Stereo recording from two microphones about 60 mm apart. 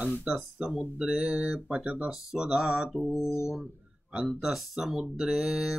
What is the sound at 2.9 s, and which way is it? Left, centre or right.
Mantra, centre.